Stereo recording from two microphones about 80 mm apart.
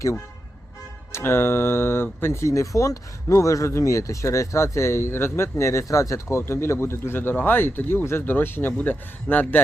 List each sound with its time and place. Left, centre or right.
1.1 s speech: left